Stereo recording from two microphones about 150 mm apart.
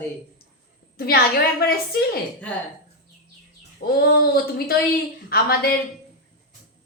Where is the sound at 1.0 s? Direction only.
90° left.